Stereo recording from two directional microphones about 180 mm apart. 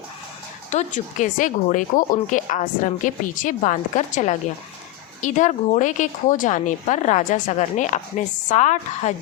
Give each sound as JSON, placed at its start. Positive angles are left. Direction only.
{"t": 0.7, "sound": "speech", "side_deg": 40}